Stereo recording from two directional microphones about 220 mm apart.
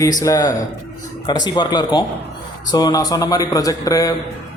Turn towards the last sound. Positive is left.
turn(degrees=15)  # may be behind; listen again after turning